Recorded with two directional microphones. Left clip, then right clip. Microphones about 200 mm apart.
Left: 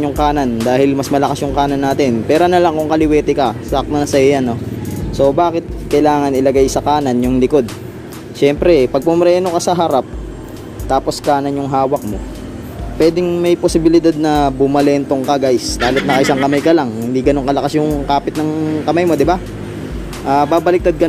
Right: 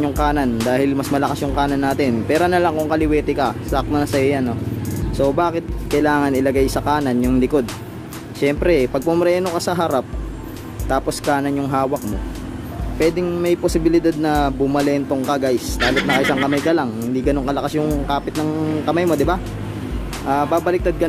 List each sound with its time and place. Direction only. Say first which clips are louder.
0.0 s speech: left 4 dB; 10° left (ahead or behind)
5.1 s speech: left 6 dB; 5° left (ahead or behind)
13.0 s speech: left 6 dB; 15° left (ahead or behind)
15.8 s speech: left 2 dB; centre (ahead or behind)
16.6 s speech: left 6 dB; 15° left (ahead or behind)